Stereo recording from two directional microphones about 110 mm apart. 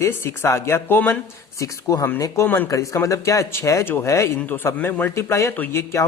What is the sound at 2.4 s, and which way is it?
Speech, 20° left (ahead or behind).